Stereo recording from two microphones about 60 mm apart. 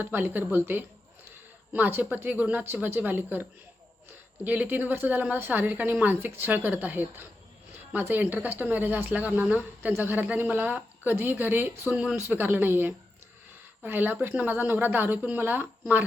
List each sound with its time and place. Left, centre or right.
0.0 s speech: right
4.4 s speech: right